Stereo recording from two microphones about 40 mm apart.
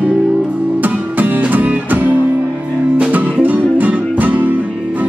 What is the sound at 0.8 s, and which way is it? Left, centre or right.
Music, right.